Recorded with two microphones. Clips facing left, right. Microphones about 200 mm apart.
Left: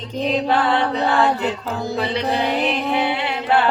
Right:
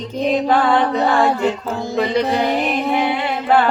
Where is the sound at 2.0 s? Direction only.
45° right (ahead or behind).